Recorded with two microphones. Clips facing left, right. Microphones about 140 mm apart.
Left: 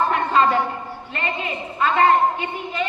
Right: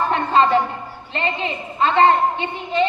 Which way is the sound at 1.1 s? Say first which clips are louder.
Right 3 dB; 25° right (ahead or behind).